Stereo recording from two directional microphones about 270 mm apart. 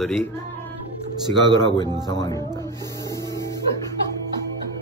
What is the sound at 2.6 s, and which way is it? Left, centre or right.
Music, centre.